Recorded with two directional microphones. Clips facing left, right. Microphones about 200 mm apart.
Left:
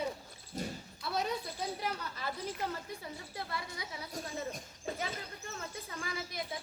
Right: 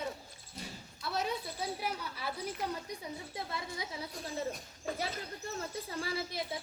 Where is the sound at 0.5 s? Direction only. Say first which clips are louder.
Left 7 dB; 45° left (ahead or behind).